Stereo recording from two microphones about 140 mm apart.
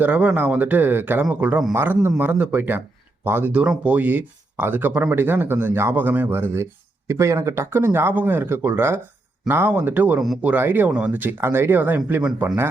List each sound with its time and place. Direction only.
0.0 s speech: 10° right (ahead or behind)